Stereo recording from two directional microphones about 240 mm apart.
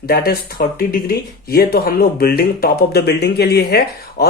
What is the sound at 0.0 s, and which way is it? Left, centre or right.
Speech, left.